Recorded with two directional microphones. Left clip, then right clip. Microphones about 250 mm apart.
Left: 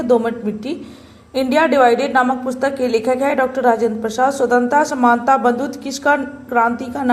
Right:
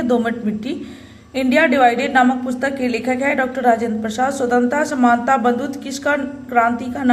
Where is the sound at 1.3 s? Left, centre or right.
Centre.